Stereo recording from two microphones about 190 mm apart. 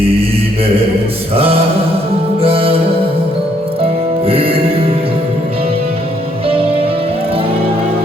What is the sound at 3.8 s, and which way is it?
Music, 30° right (ahead or behind).